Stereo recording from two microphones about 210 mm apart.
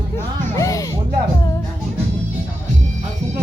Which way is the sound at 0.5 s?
15° left (ahead or behind).